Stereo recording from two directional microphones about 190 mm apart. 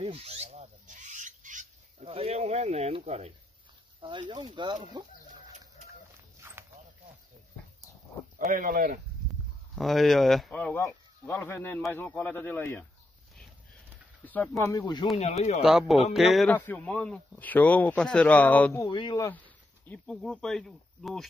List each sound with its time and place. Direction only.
0.0 s filing: 30° right (ahead or behind)
4.0 s speech: 25° right (ahead or behind)
6.4 s dog: 10° right (ahead or behind)
8.4 s speech: 45° right (ahead or behind)
9.8 s speech: centre (ahead or behind)
14.2 s speech: 10° left (ahead or behind)
15.1 s speech: 35° left (ahead or behind)
15.6 s speech: 5° right (ahead or behind); by 19.3 s 25° left (ahead or behind)
19.3 s speech: 5° left (ahead or behind)